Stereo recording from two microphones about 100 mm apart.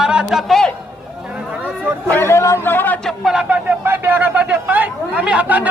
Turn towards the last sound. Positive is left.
turn(degrees=-15)  # may be behind; listen again after turning